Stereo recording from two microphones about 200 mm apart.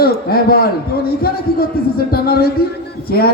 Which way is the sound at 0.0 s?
50° left (ahead or behind).